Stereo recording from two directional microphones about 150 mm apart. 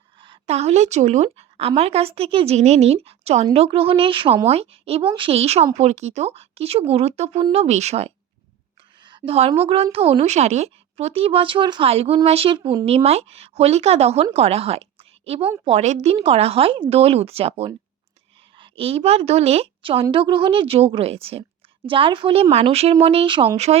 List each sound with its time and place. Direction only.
0.2 s a woman's voice: 40° right (ahead or behind)
9.0 s a sound: 35° right (ahead or behind)
9.6 s a woman's voice: 40° right (ahead or behind)